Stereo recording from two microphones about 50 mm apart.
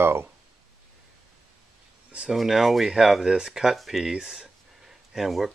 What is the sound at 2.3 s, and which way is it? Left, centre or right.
Speech, centre.